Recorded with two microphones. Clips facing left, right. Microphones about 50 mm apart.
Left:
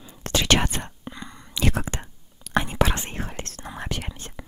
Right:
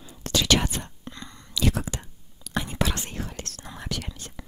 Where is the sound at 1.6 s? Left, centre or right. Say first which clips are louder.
Left 1 dB; left.